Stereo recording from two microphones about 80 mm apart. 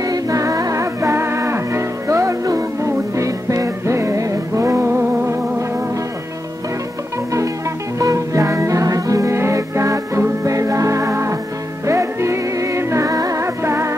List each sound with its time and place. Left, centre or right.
0.0 s music: right
8.0 s music: right